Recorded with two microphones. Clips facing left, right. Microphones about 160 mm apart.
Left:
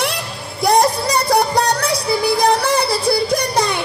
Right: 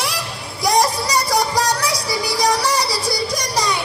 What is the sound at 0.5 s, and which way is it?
Music, 60° left (ahead or behind).